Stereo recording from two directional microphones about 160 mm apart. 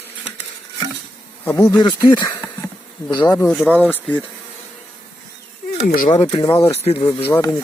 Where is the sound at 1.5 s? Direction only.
20° left (ahead or behind).